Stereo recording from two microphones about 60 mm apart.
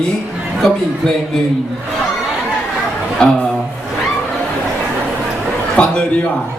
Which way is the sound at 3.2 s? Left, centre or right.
Centre.